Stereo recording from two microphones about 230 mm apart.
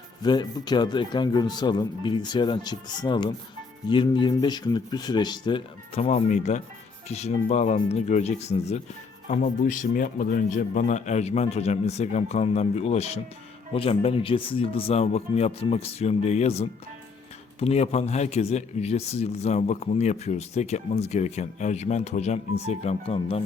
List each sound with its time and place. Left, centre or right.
0.2 s a man's voice: centre